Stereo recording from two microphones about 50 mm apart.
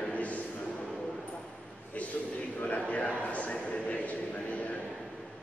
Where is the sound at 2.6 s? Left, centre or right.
Left.